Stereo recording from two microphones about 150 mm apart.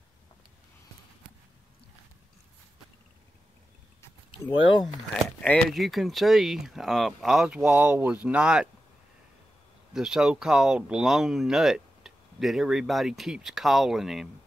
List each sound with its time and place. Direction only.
4.3 s speech: 30° left (ahead or behind)
5.7 s speech: centre (ahead or behind)
9.9 s speech: 5° right (ahead or behind)